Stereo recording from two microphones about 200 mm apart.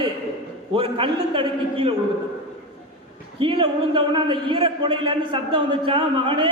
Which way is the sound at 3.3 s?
25° right (ahead or behind).